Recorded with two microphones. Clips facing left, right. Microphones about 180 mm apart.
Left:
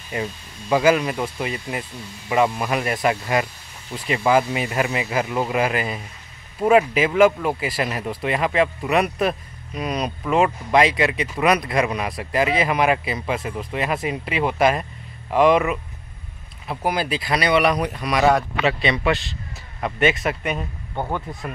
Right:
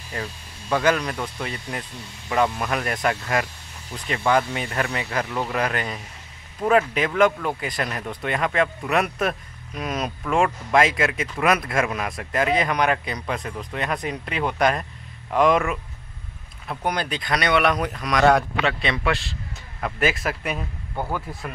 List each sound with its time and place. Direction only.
0.1 s speech: 10° left (ahead or behind)
20.9 s speech: 20° left (ahead or behind)